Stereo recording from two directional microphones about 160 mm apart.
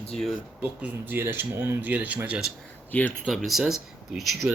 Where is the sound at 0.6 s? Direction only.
10° right (ahead or behind).